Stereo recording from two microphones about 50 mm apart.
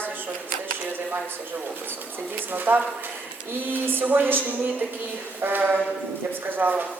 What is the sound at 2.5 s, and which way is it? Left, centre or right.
A woman's voice, right.